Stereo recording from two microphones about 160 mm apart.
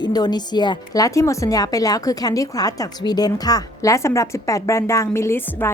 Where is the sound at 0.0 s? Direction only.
25° left (ahead or behind).